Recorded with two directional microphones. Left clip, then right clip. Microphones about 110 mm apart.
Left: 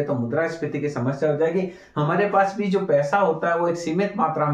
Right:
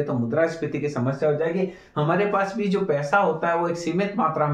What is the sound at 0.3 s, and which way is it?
Speech, 30° right (ahead or behind).